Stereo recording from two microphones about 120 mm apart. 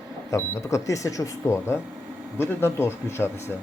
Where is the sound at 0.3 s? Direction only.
25° left (ahead or behind).